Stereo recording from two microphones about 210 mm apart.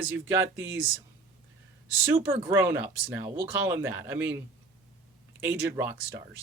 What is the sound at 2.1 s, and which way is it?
Speech, 10° right (ahead or behind).